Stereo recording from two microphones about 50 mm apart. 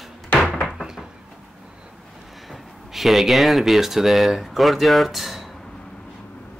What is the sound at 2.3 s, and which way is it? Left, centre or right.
Speech, centre.